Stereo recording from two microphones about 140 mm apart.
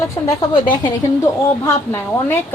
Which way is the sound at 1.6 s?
20° left (ahead or behind).